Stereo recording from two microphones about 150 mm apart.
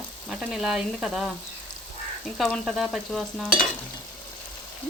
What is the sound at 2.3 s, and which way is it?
Frying, centre (ahead or behind).